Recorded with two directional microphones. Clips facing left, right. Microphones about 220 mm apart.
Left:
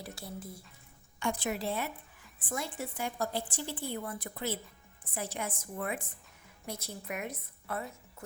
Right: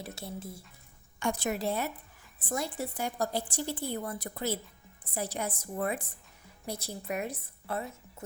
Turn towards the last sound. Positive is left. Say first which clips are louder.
# right 3 dB
turn(degrees=-30)  # may be behind; listen again after turning